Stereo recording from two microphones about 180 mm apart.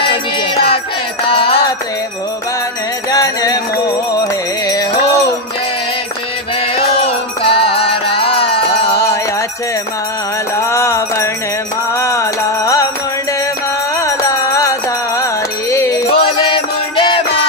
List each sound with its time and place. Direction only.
0.0 s music: 30° left (ahead or behind)
3.1 s music: 20° left (ahead or behind)
6.8 s music: 30° left (ahead or behind)
10.7 s mantra: 15° left (ahead or behind)
12.0 s music: 15° left (ahead or behind)
13.9 s music: 15° left (ahead or behind)
16.1 s music: 30° left (ahead or behind)